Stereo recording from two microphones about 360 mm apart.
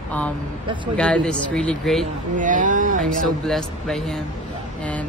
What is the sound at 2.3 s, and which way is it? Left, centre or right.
Speech, right.